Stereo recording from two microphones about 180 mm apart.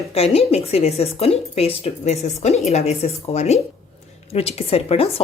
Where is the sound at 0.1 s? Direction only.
35° left (ahead or behind).